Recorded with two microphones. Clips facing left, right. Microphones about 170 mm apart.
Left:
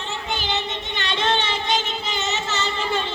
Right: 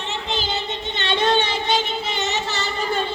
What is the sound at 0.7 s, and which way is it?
Child singing, 30° right (ahead or behind).